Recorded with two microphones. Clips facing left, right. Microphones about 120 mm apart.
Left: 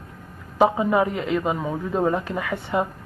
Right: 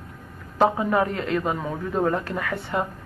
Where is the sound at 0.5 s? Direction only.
15° left (ahead or behind).